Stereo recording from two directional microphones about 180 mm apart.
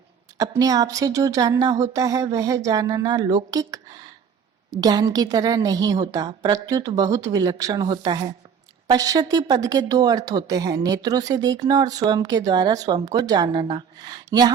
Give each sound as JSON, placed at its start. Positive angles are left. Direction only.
{"t": 0.3, "sound": "speech", "side_deg": -20}
{"t": 1.8, "sound": "a sound", "side_deg": -20}
{"t": 2.6, "sound": "speech", "side_deg": -20}
{"t": 4.8, "sound": "speech", "side_deg": -20}